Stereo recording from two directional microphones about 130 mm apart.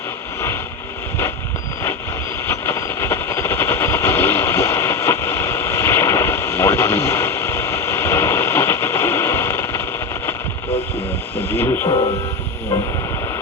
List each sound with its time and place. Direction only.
2.5 s vehicle: 20° left (ahead or behind)
11.4 s radio: 20° left (ahead or behind)